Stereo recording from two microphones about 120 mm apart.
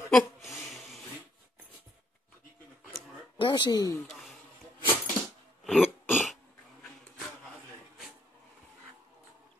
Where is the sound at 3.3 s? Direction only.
40° left (ahead or behind).